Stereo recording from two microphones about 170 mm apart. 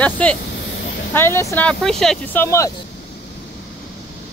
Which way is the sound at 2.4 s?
15° left (ahead or behind).